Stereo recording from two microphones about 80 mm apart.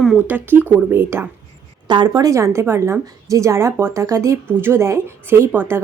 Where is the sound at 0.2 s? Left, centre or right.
Right.